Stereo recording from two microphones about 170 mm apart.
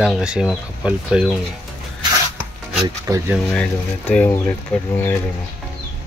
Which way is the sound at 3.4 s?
5° left (ahead or behind).